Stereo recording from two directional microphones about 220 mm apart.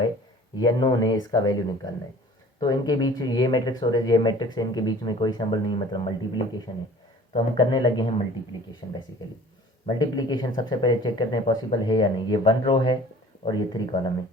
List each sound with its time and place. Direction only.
0.5 s speech: 20° left (ahead or behind)
9.8 s speech: 20° left (ahead or behind)